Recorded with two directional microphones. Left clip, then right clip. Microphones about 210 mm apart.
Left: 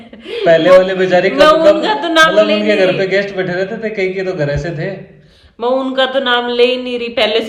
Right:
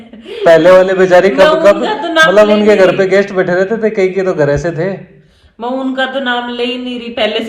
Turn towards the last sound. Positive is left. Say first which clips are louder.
# left 1 dB
turn(degrees=0)  # may be behind; listen again after turning